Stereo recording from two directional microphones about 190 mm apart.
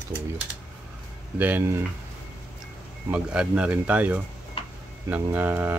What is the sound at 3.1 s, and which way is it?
Speech, 5° right (ahead or behind).